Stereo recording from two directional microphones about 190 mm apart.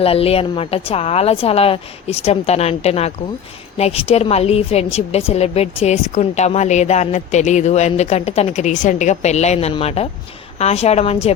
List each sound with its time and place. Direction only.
0.0 s a woman's voice: 30° left (ahead or behind)